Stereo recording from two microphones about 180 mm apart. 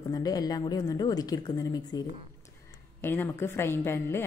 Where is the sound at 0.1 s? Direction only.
20° left (ahead or behind).